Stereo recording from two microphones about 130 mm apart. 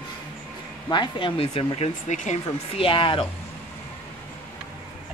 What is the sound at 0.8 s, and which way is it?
Speech, 35° left (ahead or behind).